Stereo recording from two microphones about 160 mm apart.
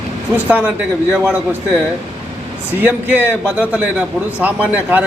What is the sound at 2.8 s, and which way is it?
A man's voice, 10° right (ahead or behind).